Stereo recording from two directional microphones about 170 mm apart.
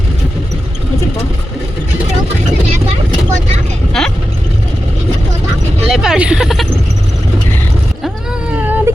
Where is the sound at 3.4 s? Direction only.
40° right (ahead or behind).